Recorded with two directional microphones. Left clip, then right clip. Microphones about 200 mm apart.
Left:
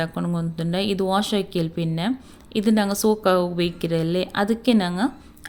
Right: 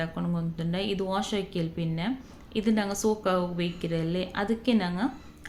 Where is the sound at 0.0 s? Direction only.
45° left (ahead or behind).